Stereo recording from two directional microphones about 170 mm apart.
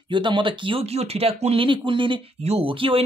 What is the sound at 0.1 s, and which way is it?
Speech, 30° right (ahead or behind).